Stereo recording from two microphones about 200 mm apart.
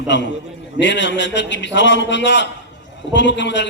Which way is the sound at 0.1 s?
60° left (ahead or behind).